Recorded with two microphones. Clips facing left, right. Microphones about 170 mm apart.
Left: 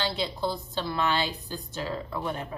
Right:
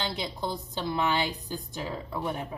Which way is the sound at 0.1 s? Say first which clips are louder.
Left 3 dB; 15° right (ahead or behind).